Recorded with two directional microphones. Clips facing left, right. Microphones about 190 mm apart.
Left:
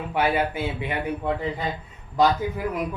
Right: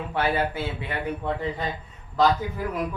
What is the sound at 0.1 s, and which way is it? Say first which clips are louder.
Speech: left 2 dB; 15° left (ahead or behind).